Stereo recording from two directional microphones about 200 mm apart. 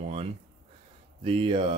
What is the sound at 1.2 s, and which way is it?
Speech, 25° right (ahead or behind).